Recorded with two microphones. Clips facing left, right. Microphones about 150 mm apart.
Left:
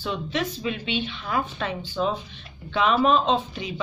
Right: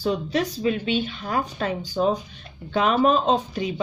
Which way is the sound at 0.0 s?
40° right (ahead or behind).